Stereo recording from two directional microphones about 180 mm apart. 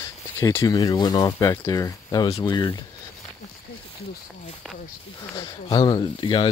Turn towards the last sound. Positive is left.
turn(degrees=25)  # may be behind; listen again after turning